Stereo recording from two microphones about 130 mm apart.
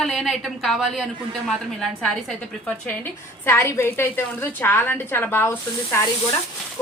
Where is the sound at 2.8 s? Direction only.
15° left (ahead or behind).